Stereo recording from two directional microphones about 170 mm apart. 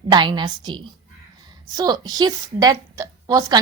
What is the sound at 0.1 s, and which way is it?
A woman's voice, 25° right (ahead or behind).